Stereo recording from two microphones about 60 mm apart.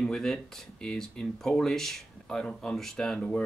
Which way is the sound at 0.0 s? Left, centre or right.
Centre.